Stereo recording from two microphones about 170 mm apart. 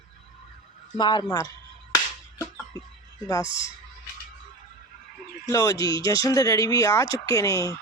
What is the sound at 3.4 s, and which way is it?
Speech, 30° right (ahead or behind).